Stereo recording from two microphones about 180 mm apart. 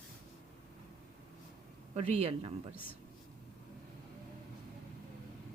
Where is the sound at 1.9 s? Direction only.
35° right (ahead or behind).